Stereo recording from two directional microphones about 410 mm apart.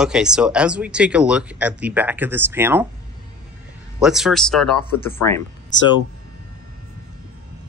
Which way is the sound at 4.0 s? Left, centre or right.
Centre.